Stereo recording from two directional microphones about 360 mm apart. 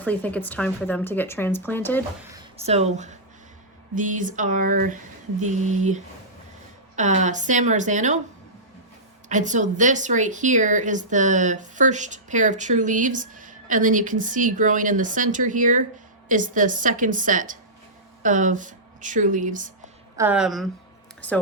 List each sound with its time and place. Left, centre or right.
0.0 s speech: centre
2.3 s speech: centre
9.3 s speech: centre
20.1 s speech: centre